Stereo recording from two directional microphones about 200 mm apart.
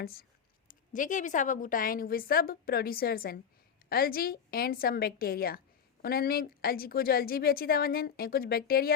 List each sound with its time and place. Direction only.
0.0 s a woman's voice: 50° left (ahead or behind)